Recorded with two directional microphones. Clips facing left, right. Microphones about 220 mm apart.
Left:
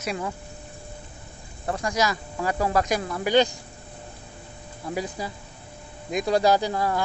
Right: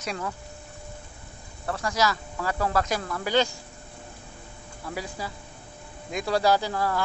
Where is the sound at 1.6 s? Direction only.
15° left (ahead or behind).